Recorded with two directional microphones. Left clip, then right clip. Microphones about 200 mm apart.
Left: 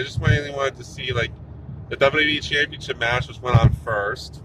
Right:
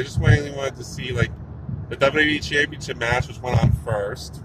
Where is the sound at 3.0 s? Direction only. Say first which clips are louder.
Even; 20° left (ahead or behind).